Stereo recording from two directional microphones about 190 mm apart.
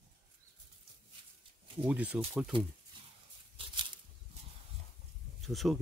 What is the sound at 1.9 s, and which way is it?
Speech, 5° right (ahead or behind).